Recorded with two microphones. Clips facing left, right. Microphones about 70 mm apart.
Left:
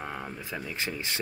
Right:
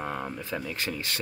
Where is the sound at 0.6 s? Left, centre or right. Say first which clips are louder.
Right 1 dB; centre.